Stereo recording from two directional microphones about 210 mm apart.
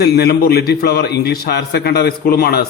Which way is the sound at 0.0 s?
50° left (ahead or behind).